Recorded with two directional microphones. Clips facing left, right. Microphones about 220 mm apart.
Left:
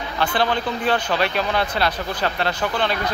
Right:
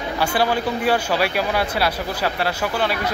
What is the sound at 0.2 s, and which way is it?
Speech, 10° right (ahead or behind).